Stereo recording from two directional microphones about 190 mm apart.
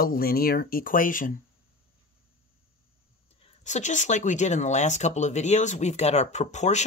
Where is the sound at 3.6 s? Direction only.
40° left (ahead or behind).